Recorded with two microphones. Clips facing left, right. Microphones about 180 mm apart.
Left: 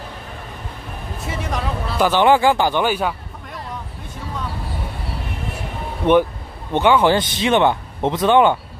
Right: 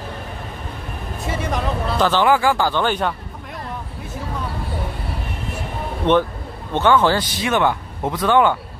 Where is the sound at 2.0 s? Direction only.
15° left (ahead or behind).